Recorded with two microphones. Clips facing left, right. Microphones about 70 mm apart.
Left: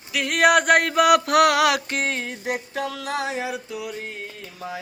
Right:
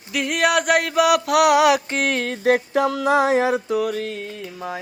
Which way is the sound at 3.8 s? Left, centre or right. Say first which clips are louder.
Right 9 dB; right.